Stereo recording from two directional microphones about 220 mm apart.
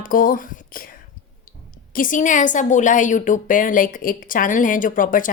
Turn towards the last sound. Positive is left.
turn(degrees=40)  # may be behind; listen again after turning